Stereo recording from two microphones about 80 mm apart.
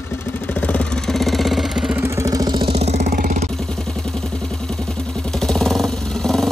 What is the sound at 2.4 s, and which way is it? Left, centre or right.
Vehicle, right.